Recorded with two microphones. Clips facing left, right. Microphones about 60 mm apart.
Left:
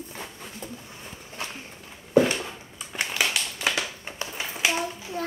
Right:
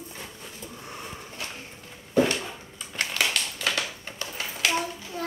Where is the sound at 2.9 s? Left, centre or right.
Centre.